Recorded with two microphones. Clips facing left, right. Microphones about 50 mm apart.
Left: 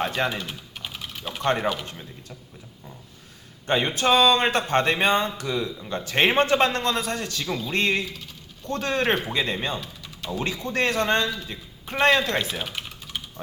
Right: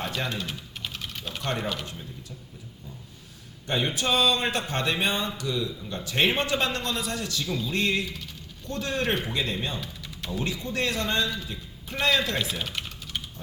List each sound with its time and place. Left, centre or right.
0.4 s typing: centre
1.5 s speech: left
3.7 s speech: left
12.5 s typing: centre